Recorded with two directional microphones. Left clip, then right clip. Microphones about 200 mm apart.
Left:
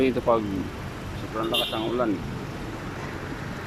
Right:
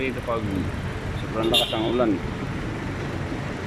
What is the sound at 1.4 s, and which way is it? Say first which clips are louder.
Speech: right 4 dB; 15° right (ahead or behind).